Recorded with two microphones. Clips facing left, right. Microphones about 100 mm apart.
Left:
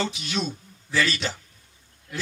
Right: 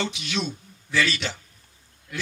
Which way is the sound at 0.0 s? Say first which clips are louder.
Even; 40° left (ahead or behind).